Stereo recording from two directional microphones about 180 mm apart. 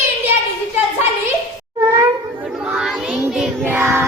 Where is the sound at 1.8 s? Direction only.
20° right (ahead or behind).